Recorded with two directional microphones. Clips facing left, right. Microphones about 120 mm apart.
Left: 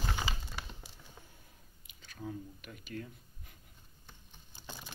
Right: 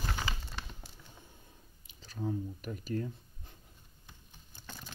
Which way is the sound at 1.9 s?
35° right (ahead or behind).